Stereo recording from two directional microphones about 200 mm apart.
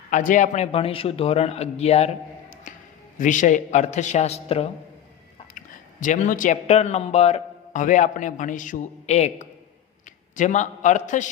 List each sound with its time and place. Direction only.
0.1 s speech: 40° left (ahead or behind)
3.2 s speech: 40° left (ahead or behind)